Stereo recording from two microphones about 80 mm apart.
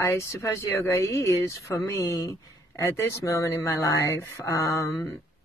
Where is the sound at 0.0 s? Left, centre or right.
Left.